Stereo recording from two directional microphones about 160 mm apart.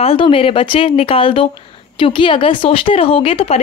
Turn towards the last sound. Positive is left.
turn(degrees=40)  # may be behind; listen again after turning